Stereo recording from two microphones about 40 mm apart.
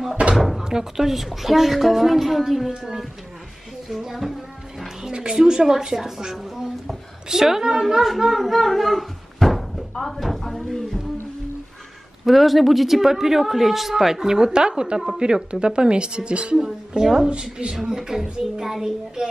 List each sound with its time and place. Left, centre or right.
0.4 s a woman's voice: centre
3.9 s music: centre
5.0 s a woman's voice: centre
8.0 s speech: centre
9.9 s a sound: centre
12.3 s a woman's voice: centre; by 17.7 s right
17.8 s speech: centre